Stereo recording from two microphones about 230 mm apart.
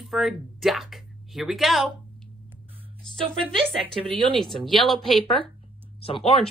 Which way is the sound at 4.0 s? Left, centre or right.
Right.